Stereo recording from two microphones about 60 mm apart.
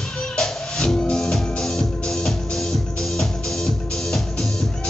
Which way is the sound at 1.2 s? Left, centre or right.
Centre.